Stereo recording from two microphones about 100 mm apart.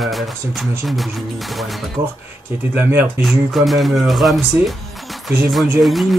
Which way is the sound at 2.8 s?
20° right (ahead or behind).